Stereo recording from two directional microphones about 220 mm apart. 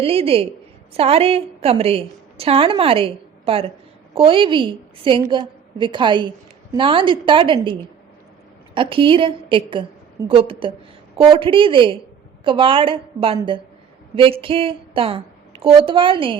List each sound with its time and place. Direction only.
0.0 s a woman's voice: 25° right (ahead or behind)